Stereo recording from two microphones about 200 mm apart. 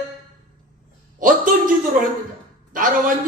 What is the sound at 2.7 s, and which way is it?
Speech, 40° right (ahead or behind).